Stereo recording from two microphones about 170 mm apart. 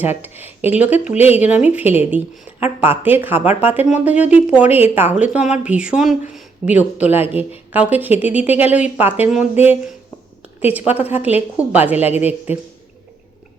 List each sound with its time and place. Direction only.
0.0 s speech: 10° right (ahead or behind)
10.7 s speech: 10° right (ahead or behind)
12.1 s speech: 40° left (ahead or behind)